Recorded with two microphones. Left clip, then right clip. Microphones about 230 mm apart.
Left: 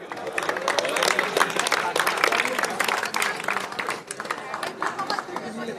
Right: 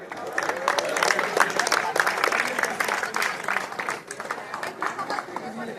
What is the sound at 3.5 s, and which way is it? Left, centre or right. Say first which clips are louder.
Applause: even; left.